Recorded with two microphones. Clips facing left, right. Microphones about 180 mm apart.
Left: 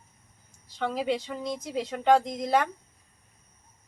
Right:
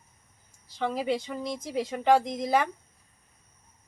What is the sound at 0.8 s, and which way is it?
Speech, 5° right (ahead or behind).